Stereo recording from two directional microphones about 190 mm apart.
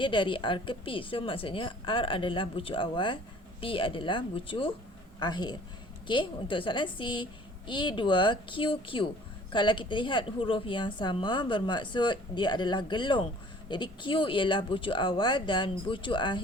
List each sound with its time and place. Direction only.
0.0 s a woman's voice: 25° left (ahead or behind)